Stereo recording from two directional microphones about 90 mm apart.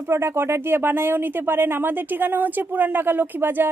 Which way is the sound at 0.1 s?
30° right (ahead or behind).